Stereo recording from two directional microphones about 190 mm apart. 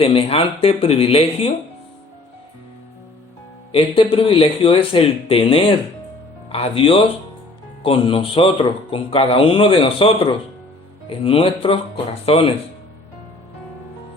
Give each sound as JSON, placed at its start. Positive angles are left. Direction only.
{"t": 0.0, "sound": "speech", "side_deg": 30}
{"t": 3.7, "sound": "speech", "side_deg": 30}
{"t": 11.2, "sound": "speech", "side_deg": 30}